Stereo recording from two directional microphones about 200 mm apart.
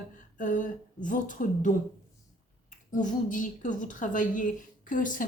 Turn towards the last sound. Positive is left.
turn(degrees=40)  # may be behind; listen again after turning